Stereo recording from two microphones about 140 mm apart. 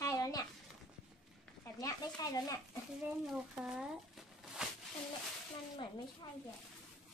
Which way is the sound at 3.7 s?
5° right (ahead or behind).